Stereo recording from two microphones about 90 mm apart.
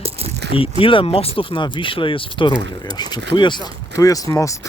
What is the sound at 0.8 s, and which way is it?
Speech, 85° left.